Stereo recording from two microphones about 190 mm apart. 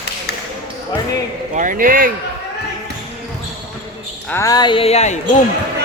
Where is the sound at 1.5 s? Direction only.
45° right (ahead or behind).